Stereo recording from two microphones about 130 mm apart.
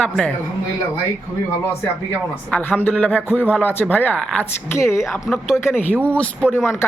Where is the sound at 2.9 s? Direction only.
10° left (ahead or behind).